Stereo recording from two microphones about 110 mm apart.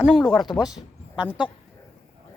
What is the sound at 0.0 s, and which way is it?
Speech, 5° right (ahead or behind).